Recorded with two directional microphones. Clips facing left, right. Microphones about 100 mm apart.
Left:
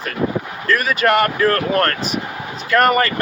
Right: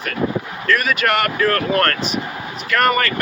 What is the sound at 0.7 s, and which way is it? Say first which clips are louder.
Speech: left 2 dB; 35° left (ahead or behind).